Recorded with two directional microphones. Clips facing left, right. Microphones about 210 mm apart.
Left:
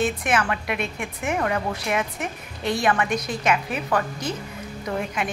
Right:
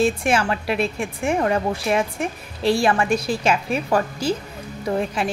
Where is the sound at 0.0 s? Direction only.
30° right (ahead or behind).